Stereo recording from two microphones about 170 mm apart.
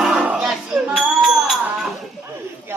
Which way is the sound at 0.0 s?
Centre (ahead or behind).